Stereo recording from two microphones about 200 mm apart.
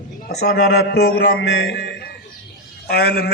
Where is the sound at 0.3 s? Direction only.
55° left (ahead or behind).